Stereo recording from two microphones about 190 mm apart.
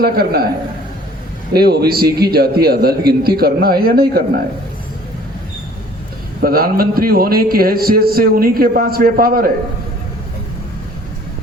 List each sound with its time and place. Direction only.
0.0 s a man's voice: 55° right (ahead or behind)
1.5 s a man's voice: 55° right (ahead or behind)
6.4 s a man's voice: 50° right (ahead or behind)